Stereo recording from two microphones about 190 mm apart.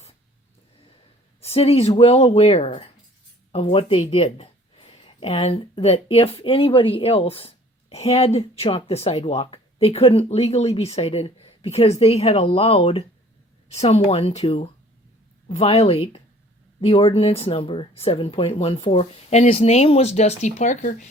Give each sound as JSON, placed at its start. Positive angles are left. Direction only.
{"t": 1.4, "sound": "speech", "side_deg": 30}